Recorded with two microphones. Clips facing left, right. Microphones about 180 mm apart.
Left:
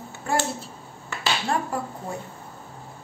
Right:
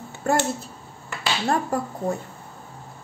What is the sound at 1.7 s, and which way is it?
Speech, 40° right (ahead or behind).